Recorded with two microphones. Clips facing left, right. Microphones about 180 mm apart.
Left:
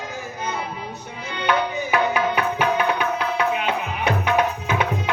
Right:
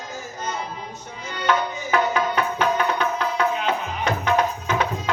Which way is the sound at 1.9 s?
10° left (ahead or behind).